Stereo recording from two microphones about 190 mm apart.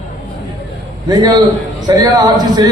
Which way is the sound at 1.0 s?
20° right (ahead or behind).